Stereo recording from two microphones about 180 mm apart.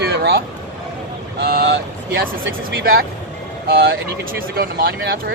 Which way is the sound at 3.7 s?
60° right (ahead or behind).